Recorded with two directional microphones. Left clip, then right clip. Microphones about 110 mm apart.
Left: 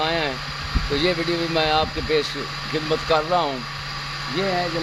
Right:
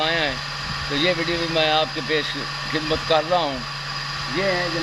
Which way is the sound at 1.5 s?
40° left (ahead or behind).